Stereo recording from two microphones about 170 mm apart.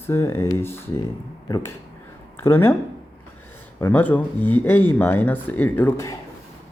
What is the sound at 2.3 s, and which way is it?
Speech, 15° left (ahead or behind).